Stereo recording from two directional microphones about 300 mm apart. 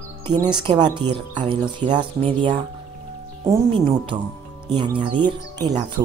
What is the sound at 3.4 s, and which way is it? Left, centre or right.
Speech, centre.